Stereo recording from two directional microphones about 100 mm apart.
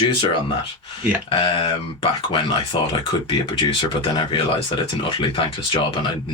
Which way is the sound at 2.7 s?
60° left (ahead or behind).